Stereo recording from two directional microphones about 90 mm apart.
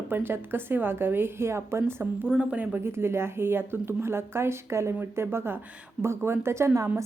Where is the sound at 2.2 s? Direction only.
10° right (ahead or behind).